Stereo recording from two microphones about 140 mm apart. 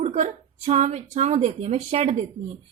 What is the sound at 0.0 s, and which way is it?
A woman's voice, 50° right (ahead or behind).